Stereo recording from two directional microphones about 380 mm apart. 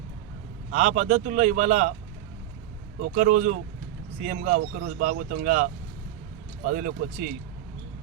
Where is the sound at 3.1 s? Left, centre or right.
Right.